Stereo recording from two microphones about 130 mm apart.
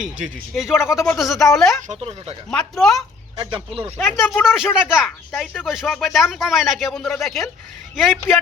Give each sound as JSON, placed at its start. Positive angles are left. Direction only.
{"t": 0.0, "sound": "speech", "side_deg": -5}
{"t": 1.9, "sound": "speech", "side_deg": -50}
{"t": 2.5, "sound": "speech", "side_deg": 5}
{"t": 3.3, "sound": "speech", "side_deg": -40}
{"t": 4.4, "sound": "speech", "side_deg": -5}